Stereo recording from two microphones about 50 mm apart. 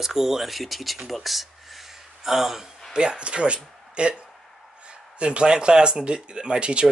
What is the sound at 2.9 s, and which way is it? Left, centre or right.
Speech, centre.